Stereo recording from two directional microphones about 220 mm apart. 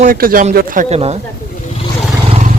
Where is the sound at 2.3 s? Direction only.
30° right (ahead or behind).